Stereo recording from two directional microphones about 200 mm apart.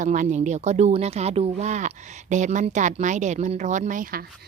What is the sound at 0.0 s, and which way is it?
Speech, 40° right (ahead or behind).